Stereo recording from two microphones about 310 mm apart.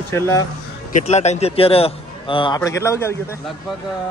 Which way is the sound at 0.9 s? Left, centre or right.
Left.